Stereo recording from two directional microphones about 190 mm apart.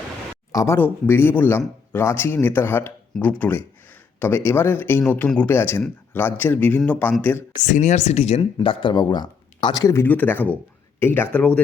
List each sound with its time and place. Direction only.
0.5 s speech: 15° left (ahead or behind)
7.6 s speech: 40° left (ahead or behind); by 11.6 s 10° left (ahead or behind)